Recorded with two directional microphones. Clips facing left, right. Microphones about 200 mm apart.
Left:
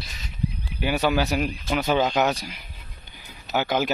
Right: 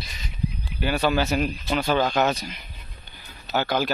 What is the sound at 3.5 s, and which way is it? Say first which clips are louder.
Speech: even; 15° left (ahead or behind).